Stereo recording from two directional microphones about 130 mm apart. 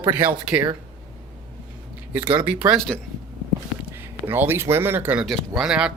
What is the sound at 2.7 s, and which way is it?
Speech, 5° left (ahead or behind).